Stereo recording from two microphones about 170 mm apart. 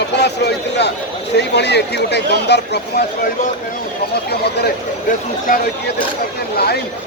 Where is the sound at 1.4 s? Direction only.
85° left.